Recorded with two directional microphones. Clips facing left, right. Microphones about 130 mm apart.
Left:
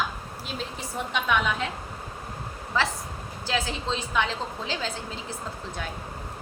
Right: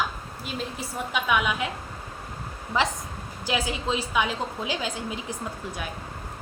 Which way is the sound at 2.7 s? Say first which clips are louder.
Right 2 dB; 15° right (ahead or behind).